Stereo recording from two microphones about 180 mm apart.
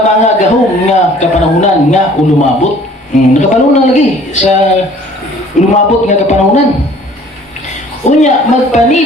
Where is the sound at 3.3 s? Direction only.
40° left (ahead or behind).